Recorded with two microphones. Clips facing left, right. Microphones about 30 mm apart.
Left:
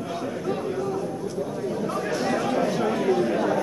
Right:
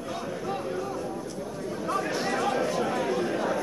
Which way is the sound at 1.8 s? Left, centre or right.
Centre.